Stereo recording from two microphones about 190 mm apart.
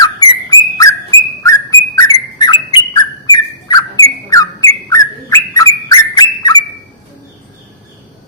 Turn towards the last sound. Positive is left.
turn(degrees=20)  # may be behind; listen again after turning